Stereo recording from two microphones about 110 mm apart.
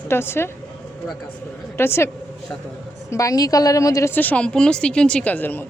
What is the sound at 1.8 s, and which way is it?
A woman's voice, 25° left (ahead or behind).